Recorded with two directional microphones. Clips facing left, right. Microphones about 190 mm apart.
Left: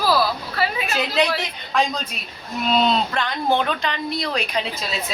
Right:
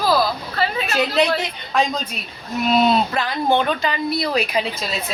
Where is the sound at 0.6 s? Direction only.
10° left (ahead or behind).